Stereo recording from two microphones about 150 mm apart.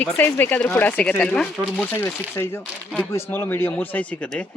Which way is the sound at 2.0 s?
15° left (ahead or behind).